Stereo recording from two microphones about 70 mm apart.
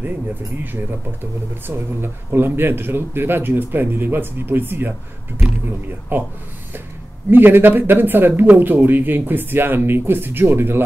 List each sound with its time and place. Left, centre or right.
0.7 s speech: right
6.1 s speech: right